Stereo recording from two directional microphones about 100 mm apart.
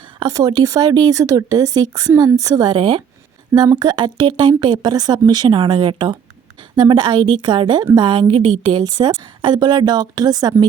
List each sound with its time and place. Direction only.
0.0 s a woman's voice: 45° right (ahead or behind)